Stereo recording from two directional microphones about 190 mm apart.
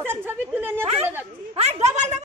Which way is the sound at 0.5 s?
10° right (ahead or behind).